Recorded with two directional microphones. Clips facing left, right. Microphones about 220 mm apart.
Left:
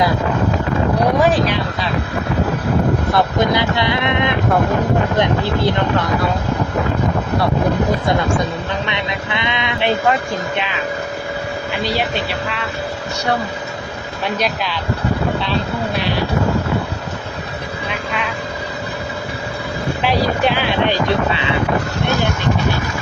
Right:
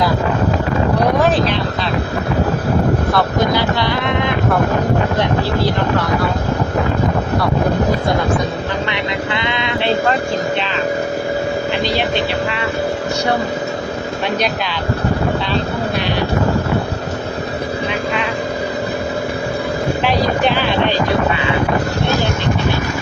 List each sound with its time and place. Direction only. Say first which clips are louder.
1.2 s speech: even; 10° left (ahead or behind)
3.1 s speech: even; 20° left (ahead or behind)
8.9 s speech: right 3 dB; 20° left (ahead or behind)